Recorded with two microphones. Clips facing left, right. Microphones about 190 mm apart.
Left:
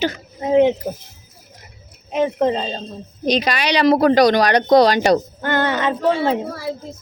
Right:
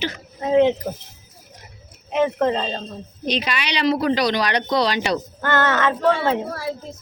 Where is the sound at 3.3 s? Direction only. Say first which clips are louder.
Left 6 dB; 40° left (ahead or behind).